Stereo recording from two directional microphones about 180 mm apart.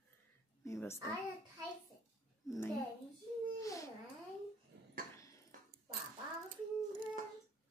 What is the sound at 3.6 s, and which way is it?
Babbling, 15° left (ahead or behind).